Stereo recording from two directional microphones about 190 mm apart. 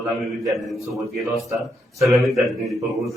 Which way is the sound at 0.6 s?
Centre (ahead or behind).